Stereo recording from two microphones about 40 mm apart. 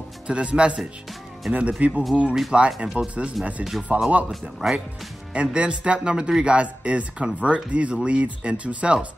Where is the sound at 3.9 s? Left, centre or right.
Right.